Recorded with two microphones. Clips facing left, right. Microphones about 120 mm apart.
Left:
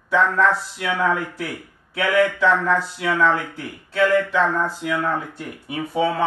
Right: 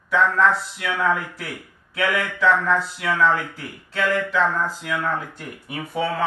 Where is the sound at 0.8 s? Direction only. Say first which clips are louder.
Left 1 dB; 25° left (ahead or behind).